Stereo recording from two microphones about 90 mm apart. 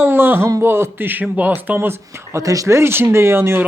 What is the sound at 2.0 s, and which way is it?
A man's voice, 35° right (ahead or behind).